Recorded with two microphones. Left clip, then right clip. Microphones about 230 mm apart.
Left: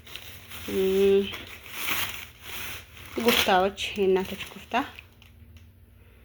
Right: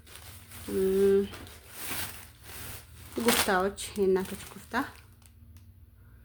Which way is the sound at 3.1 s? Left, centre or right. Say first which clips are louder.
Left 5 dB; centre.